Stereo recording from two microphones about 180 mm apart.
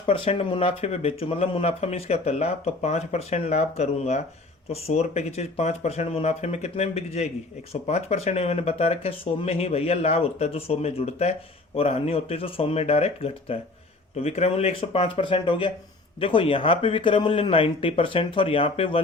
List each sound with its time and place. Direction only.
0.0 s speech: 30° left (ahead or behind)